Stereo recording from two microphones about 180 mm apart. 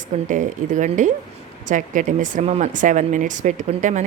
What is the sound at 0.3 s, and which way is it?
Speech, 45° right (ahead or behind).